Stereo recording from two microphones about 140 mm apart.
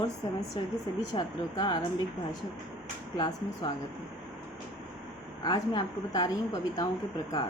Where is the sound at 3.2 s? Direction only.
30° left (ahead or behind).